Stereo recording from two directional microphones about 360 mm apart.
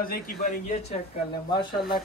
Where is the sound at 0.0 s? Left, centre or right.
Left.